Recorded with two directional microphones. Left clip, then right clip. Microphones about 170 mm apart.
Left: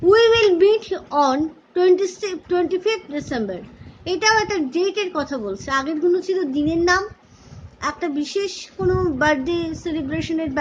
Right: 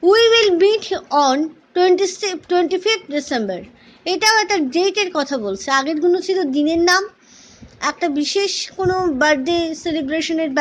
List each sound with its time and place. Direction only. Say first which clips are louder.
0.0 s a woman's voice: right 2 dB; 20° right (ahead or behind)